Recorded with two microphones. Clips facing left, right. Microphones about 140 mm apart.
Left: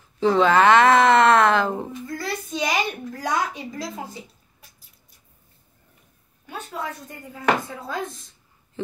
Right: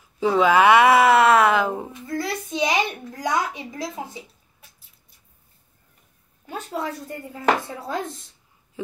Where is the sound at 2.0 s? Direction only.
20° right (ahead or behind).